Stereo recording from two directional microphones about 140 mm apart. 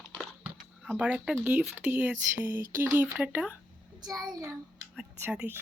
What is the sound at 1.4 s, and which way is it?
Speech, 15° right (ahead or behind).